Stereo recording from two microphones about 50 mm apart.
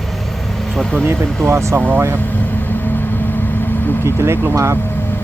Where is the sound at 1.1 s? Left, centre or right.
Right.